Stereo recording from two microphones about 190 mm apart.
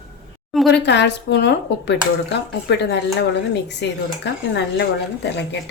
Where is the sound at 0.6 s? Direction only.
65° left (ahead or behind).